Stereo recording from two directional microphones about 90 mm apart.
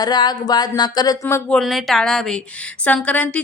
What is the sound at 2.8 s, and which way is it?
Speech, 15° left (ahead or behind).